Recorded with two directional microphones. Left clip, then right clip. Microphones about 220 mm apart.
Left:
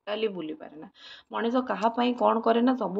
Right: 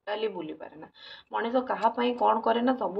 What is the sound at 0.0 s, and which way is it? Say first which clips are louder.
Speech: left 1 dB; 25° left (ahead or behind).